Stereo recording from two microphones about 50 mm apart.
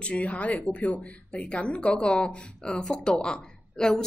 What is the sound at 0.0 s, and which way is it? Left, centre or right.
A woman's voice, left.